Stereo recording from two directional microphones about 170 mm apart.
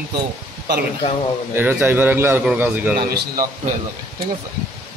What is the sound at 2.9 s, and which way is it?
Speech, 65° right (ahead or behind).